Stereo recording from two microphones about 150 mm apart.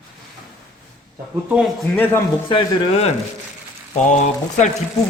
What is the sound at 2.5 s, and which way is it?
Speech, 45° left (ahead or behind).